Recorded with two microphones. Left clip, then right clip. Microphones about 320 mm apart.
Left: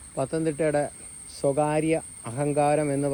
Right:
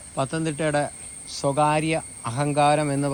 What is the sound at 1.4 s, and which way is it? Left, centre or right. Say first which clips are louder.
Cricket: right 1 dB; right.